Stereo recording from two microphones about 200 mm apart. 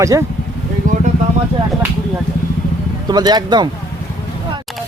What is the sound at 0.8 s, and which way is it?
Vehicle, 40° right (ahead or behind).